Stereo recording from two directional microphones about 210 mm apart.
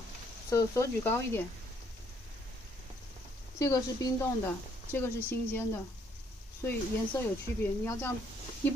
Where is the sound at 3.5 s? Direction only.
15° left (ahead or behind).